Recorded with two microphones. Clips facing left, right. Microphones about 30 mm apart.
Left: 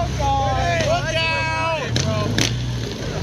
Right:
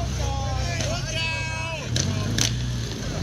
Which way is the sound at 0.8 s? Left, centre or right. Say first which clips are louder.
Left 8 dB; left.